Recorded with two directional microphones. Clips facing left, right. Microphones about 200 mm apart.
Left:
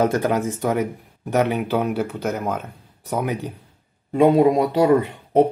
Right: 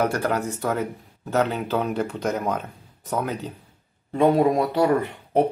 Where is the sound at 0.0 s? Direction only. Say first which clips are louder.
Left 4 dB; 20° left (ahead or behind).